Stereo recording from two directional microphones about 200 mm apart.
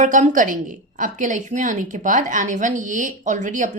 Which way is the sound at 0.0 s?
40° right (ahead or behind).